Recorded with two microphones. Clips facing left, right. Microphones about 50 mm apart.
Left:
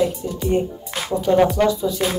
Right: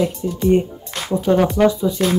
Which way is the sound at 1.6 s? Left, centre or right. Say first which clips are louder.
Right 3 dB; centre.